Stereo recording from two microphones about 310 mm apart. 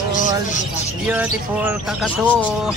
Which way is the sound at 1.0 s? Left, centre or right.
Centre.